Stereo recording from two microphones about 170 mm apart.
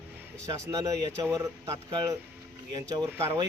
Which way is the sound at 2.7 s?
20° right (ahead or behind).